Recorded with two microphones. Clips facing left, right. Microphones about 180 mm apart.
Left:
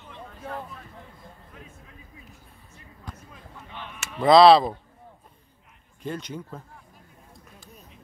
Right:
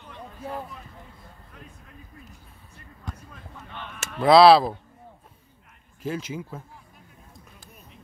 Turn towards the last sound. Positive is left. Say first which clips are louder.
# right 2 dB
turn(degrees=-5)  # may be behind; listen again after turning